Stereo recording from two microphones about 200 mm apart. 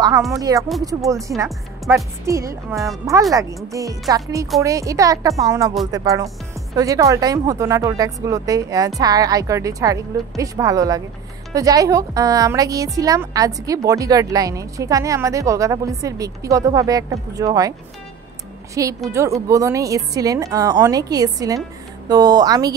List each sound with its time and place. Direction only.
0.3 s a woman's voice: 15° right (ahead or behind)
2.7 s speech: centre (ahead or behind)
3.1 s a woman's voice: 15° right (ahead or behind)
19.0 s a woman's voice: 15° right (ahead or behind)